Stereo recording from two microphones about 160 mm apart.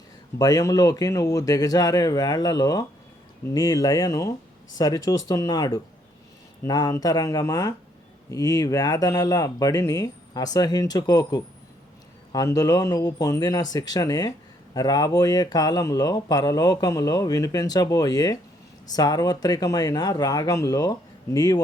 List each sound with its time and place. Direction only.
0.3 s speech: 25° left (ahead or behind)